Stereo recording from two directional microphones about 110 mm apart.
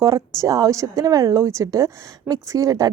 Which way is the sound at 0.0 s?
30° right (ahead or behind).